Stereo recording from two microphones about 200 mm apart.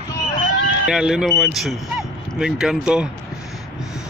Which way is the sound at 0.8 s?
5° right (ahead or behind).